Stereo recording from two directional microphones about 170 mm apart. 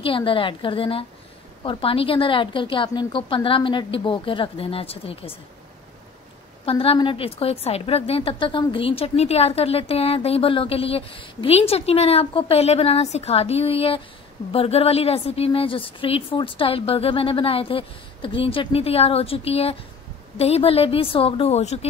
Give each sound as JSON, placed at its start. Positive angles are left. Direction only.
{"t": 0.0, "sound": "a woman's voice", "side_deg": 30}
{"t": 6.6, "sound": "a woman's voice", "side_deg": 35}